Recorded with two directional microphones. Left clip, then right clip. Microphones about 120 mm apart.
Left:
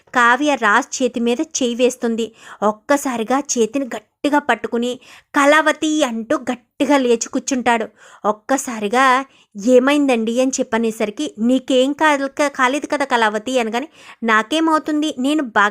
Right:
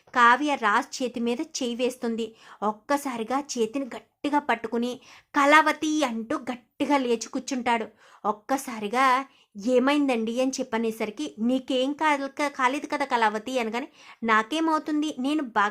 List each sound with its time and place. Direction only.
0.1 s speech: 55° left (ahead or behind)